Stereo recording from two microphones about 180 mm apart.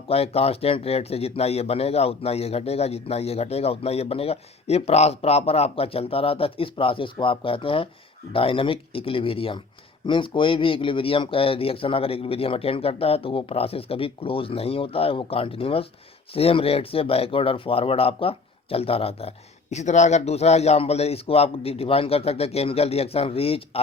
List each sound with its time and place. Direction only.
0.1 s speech: 35° left (ahead or behind)